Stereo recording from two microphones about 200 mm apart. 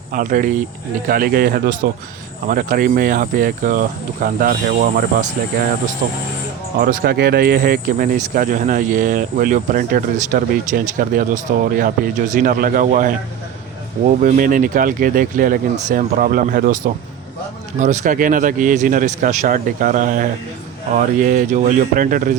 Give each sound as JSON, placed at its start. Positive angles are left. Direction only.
{"t": 0.1, "sound": "speech", "side_deg": -45}
{"t": 6.7, "sound": "a man's voice", "side_deg": -45}
{"t": 14.2, "sound": "a man's voice", "side_deg": -40}